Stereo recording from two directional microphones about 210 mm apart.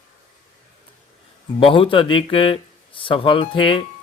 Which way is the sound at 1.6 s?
25° left (ahead or behind).